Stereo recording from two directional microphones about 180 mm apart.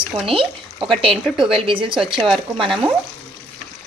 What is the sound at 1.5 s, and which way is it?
Speech, 30° right (ahead or behind).